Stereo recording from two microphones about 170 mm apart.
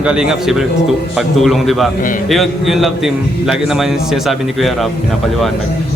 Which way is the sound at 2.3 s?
Centre (ahead or behind).